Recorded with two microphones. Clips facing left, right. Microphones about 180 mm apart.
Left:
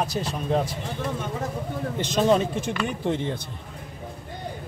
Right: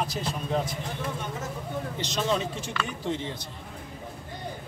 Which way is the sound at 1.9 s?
50° left (ahead or behind).